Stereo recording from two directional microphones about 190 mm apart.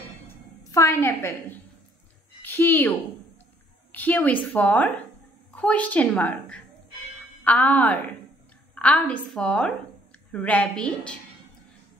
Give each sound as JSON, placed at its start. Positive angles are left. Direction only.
{"t": 0.7, "sound": "a woman's voice", "side_deg": 15}
{"t": 3.9, "sound": "a woman's voice", "side_deg": 10}